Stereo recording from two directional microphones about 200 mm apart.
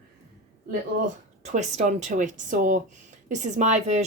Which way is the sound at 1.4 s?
35° right (ahead or behind).